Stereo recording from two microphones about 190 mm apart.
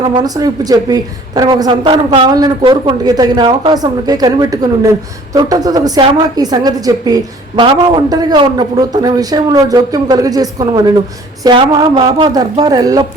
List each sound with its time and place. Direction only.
0.2 s a woman's voice: 20° right (ahead or behind)